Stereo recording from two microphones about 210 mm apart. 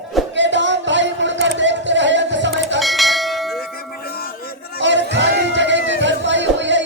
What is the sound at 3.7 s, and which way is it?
Music, 45° left (ahead or behind).